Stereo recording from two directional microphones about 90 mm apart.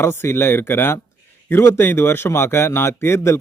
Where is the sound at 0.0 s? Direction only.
30° left (ahead or behind).